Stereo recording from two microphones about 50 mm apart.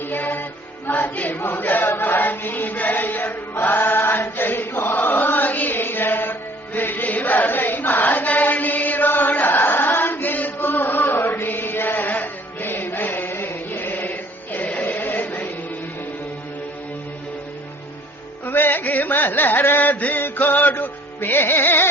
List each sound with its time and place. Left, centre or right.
0.0 s music: left
1.4 s chant: left
6.7 s choir: left
18.4 s music: left